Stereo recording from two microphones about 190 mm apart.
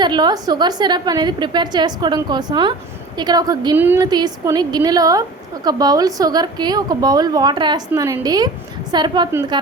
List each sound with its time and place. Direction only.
0.0 s a woman's voice: 20° right (ahead or behind)